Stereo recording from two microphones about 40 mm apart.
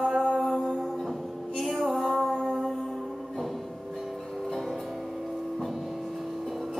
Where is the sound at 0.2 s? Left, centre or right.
Centre.